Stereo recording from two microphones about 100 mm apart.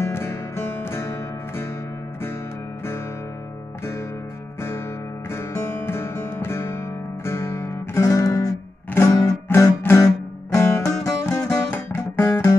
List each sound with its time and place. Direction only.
0.0 s music: 25° left (ahead or behind)
4.6 s music: 25° left (ahead or behind)